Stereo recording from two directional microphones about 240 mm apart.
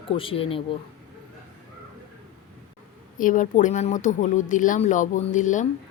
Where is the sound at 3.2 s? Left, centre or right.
Left.